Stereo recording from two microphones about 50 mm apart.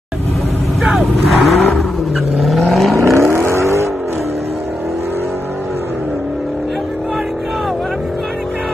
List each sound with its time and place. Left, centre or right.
0.8 s vehicle: centre
3.0 s vehicle: right
3.3 s vehicle: right
3.5 s vehicle: right